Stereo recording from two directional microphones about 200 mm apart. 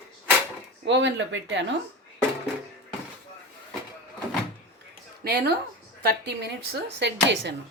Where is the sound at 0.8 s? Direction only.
65° right (ahead or behind).